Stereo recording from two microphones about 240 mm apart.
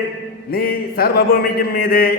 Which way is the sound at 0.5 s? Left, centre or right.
Left.